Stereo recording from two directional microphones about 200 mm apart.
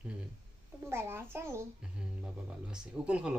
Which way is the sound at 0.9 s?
10° right (ahead or behind).